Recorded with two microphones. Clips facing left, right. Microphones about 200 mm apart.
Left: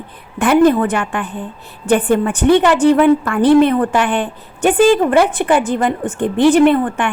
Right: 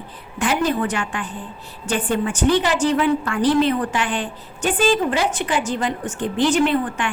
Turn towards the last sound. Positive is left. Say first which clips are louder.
# left 7 dB
turn(degrees=55)  # may be behind; listen again after turning